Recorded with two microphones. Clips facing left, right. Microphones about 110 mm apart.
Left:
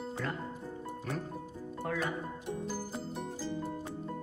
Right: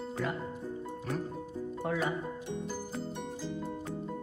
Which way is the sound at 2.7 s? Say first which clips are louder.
Right 1 dB; 5° left (ahead or behind).